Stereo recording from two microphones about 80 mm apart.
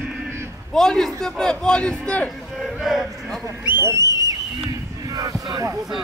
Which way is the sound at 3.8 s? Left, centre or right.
Right.